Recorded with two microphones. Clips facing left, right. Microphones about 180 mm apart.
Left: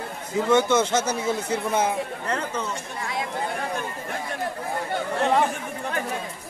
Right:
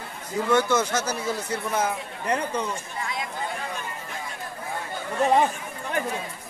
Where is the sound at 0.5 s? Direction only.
25° left (ahead or behind).